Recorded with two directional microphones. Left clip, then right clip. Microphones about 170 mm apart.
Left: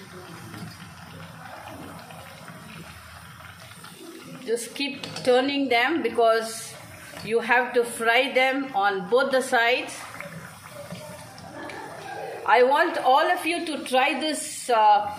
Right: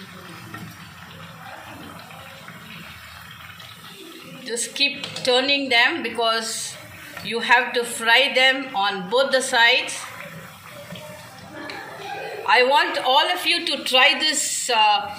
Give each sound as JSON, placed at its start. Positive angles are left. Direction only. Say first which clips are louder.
{"t": 4.5, "sound": "a man's voice", "louder": "right 5 dB", "side_deg": 65}
{"t": 12.4, "sound": "a man's voice", "louder": "right 2 dB", "side_deg": 65}